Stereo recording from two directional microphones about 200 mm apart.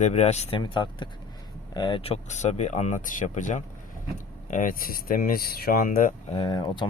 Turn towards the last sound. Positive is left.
turn(degrees=20)  # may be behind; listen again after turning